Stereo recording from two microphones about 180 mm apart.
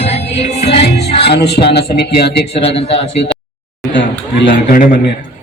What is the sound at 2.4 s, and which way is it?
Speech, 35° left (ahead or behind).